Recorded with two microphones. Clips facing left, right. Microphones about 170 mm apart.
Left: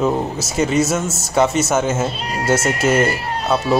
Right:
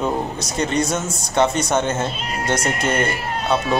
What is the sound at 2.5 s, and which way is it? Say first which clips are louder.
Speech: left 5 dB; 5° left (ahead or behind).